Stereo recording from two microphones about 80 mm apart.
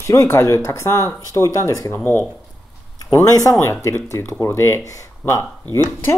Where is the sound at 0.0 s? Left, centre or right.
Left.